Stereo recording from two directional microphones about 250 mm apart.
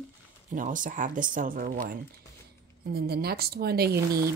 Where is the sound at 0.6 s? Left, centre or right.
Right.